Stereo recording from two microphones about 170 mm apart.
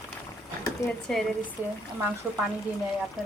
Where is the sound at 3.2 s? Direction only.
Centre (ahead or behind).